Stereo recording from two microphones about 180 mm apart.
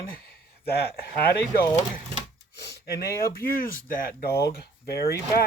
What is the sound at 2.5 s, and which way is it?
Speech, 65° left (ahead or behind).